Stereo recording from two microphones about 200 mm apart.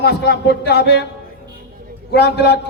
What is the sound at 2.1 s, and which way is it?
Speech, 55° left (ahead or behind).